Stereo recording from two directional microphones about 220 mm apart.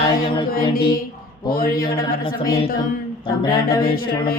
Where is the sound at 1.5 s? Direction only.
40° left (ahead or behind).